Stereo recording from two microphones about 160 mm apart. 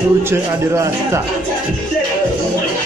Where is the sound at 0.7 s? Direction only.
20° right (ahead or behind).